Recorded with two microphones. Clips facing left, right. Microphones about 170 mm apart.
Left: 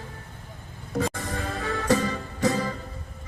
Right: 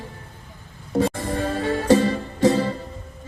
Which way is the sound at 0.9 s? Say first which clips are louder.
Right 6 dB; 30° right (ahead or behind).